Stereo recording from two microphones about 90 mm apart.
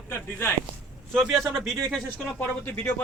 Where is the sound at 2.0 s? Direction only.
20° left (ahead or behind).